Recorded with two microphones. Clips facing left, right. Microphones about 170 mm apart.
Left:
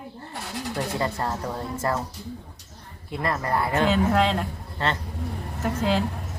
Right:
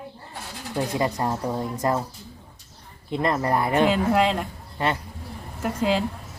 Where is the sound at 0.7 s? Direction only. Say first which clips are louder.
Right 4 dB; 15° right (ahead or behind).